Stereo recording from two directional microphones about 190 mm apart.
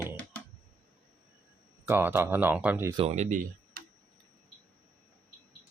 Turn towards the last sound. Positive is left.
turn(degrees=-45)  # may be behind; listen again after turning